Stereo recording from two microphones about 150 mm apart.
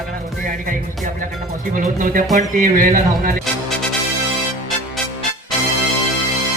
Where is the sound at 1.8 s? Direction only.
65° right (ahead or behind).